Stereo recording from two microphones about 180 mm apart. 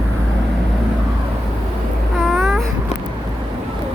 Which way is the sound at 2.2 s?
Centre (ahead or behind).